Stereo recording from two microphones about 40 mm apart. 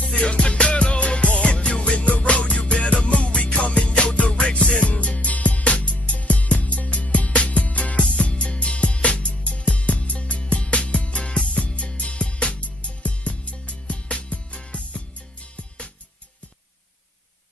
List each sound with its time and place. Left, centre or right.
0.1 s music: left
8.0 s music: left